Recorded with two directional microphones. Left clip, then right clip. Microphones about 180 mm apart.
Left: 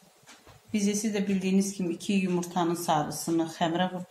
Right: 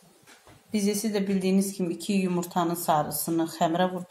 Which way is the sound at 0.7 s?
30° right (ahead or behind).